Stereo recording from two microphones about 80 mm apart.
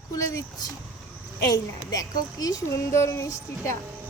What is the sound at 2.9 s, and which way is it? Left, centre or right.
Speech, left.